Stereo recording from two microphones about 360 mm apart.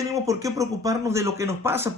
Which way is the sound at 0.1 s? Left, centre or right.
Centre.